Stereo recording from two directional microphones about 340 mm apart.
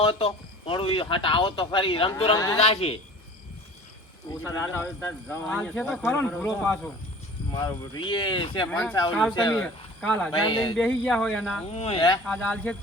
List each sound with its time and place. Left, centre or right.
0.0 s speech: centre
4.3 s speech: centre
10.8 s speech: centre
11.7 s speech: centre